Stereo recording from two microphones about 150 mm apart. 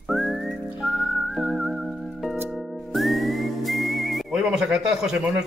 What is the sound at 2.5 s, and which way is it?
Music, centre (ahead or behind).